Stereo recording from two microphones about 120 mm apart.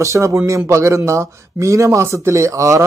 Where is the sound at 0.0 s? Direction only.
25° right (ahead or behind).